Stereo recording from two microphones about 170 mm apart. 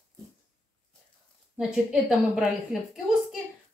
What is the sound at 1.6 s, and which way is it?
A woman's voice, 5° right (ahead or behind).